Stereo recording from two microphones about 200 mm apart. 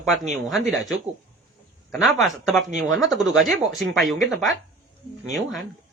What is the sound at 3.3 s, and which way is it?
Speech, centre (ahead or behind).